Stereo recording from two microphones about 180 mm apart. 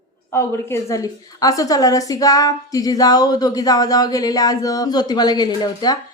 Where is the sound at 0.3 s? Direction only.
15° left (ahead or behind).